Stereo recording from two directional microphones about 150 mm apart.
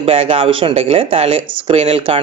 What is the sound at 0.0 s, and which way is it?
Speech, 40° right (ahead or behind).